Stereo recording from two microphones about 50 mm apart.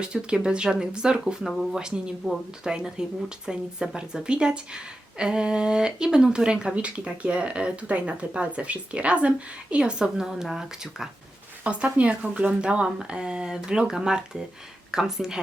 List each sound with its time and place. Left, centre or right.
0.0 s speech: centre
11.6 s speech: right; by 15.4 s centre